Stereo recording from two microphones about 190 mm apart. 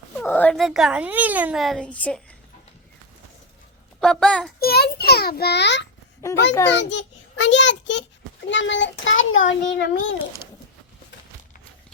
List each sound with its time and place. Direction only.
0.2 s a child's voice: 10° left (ahead or behind)
4.0 s a child's voice: 5° left (ahead or behind)
4.6 s a child's voice: 55° left (ahead or behind)